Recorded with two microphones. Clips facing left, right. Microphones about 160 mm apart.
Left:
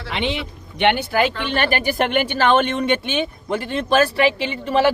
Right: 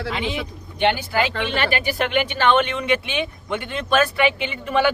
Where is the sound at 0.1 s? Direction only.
75° left (ahead or behind).